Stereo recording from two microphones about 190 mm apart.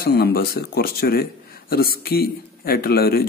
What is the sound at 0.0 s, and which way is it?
Speech, 55° left (ahead or behind).